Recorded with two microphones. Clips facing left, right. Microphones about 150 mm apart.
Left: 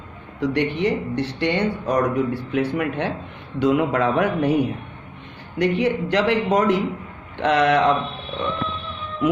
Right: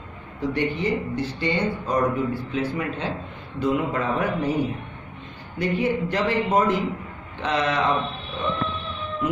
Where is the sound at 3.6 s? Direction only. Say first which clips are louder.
Left 5 dB; 90° left.